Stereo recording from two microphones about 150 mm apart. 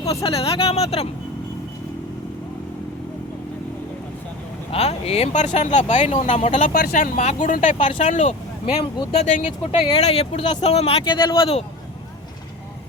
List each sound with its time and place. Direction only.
0.2 s speech: 40° left (ahead or behind)
4.7 s speech: 45° left (ahead or behind)
6.7 s speech: 75° left (ahead or behind); by 8.4 s 55° left (ahead or behind)
8.8 s speech: 35° left (ahead or behind)
9.2 s speech: 55° left (ahead or behind)
9.5 s speech: 35° left (ahead or behind)